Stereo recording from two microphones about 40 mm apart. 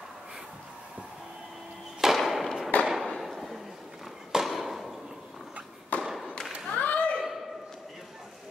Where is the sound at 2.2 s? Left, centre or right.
Centre.